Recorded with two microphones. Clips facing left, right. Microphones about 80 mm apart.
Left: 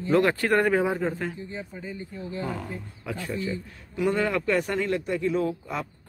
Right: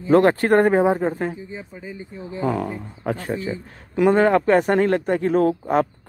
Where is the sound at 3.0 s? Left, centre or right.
Right.